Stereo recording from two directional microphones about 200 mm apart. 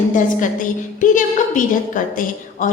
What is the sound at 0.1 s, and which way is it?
A woman's voice, 40° left (ahead or behind).